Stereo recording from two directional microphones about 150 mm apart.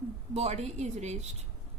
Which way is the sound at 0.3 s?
45° right (ahead or behind).